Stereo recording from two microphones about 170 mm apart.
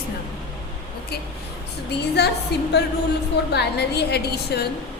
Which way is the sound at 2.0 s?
75° left (ahead or behind).